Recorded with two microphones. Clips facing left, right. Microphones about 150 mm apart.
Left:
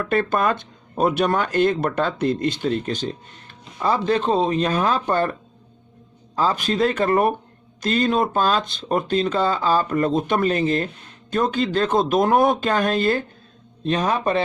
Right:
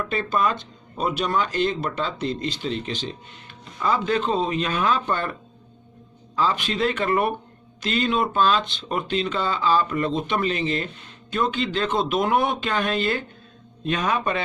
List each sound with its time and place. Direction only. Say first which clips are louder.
0.0 s speech: left 3 dB; 55° left (ahead or behind); by 14.4 s 35° left (ahead or behind)